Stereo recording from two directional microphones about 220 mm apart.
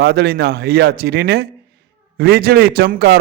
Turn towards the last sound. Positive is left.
turn(degrees=-45)  # may be behind; listen again after turning